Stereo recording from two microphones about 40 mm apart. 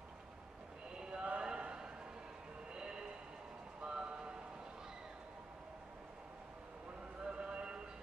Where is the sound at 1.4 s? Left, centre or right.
Right.